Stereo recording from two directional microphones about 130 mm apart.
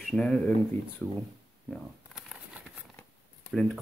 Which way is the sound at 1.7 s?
5° right (ahead or behind).